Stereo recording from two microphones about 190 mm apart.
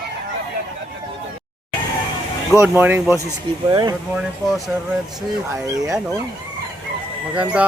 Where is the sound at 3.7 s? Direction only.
20° right (ahead or behind).